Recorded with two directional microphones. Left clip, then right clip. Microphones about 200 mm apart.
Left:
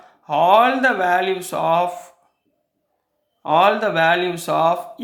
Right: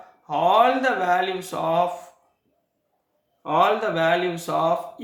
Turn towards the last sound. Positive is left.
turn(degrees=45)  # may be behind; listen again after turning